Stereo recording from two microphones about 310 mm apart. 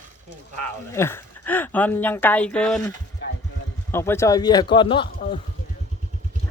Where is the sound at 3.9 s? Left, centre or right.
Centre.